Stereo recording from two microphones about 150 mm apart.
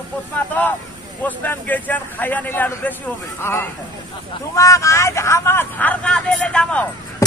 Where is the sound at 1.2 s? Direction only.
10° left (ahead or behind).